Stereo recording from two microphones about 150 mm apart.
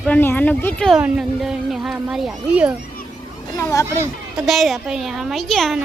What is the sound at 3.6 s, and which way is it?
Speech, 20° left (ahead or behind).